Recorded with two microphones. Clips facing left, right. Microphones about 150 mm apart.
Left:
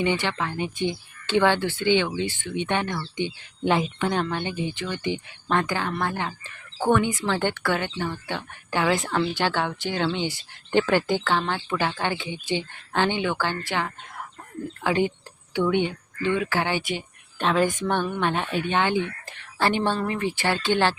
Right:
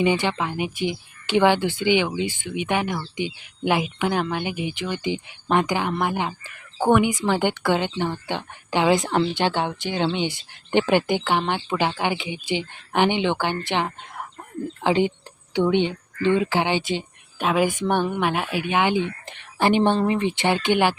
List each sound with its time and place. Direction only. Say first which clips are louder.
0.0 s a woman's voice: right 3 dB; 15° right (ahead or behind)
17.3 s a woman's voice: right 1 dB; 10° right (ahead or behind)